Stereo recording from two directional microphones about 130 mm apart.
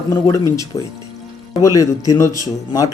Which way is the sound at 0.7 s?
50° left (ahead or behind).